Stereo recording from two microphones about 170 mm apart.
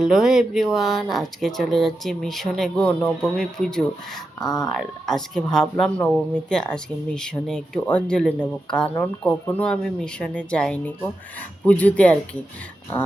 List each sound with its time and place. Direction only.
0.0 s speech: centre (ahead or behind)
4.4 s speech: 20° left (ahead or behind)
4.8 s speech: 5° left (ahead or behind)